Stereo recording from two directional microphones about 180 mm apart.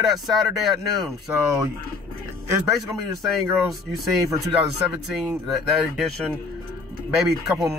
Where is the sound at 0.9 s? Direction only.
15° right (ahead or behind).